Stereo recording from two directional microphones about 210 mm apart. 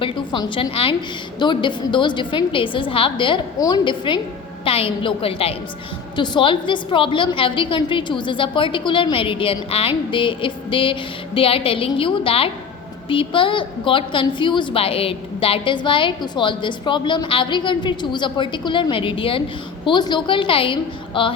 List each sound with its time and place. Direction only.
0.0 s a woman's voice: 20° left (ahead or behind)